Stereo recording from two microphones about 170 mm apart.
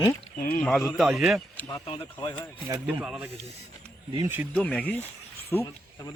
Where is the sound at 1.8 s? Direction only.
30° left (ahead or behind).